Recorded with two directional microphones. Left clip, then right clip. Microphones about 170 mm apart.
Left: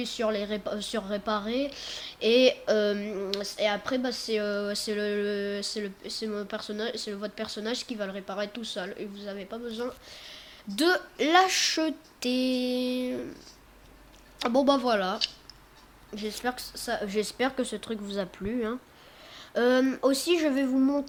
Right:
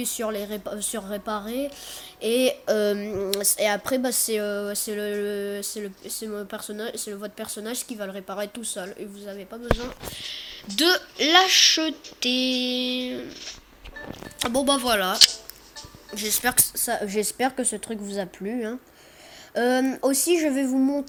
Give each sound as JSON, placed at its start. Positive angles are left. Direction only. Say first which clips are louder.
{"t": 0.0, "sound": "a woman's voice", "louder": "even", "side_deg": -15}